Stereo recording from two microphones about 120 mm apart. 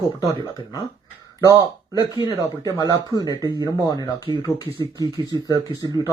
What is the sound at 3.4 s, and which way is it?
Speech, 30° right (ahead or behind).